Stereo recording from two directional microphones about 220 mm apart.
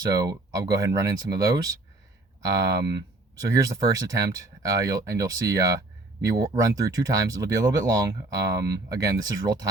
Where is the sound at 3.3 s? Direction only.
15° right (ahead or behind).